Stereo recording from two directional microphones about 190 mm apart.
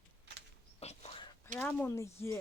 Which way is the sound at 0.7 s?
35° left (ahead or behind).